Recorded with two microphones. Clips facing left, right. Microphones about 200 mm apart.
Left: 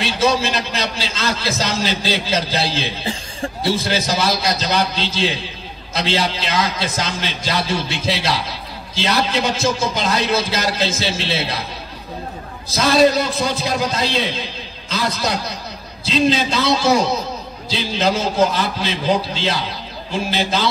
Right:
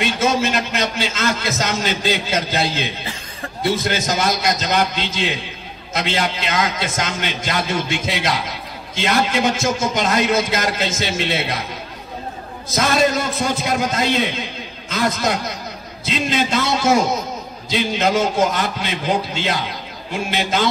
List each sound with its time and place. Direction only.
0.0 s a man's voice: 30° left (ahead or behind)
12.6 s a man's voice: 30° left (ahead or behind)
16.1 s a man's voice: 30° left (ahead or behind)